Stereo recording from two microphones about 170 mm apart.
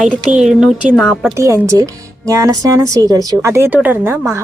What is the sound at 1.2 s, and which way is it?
A woman's voice, 15° right (ahead or behind).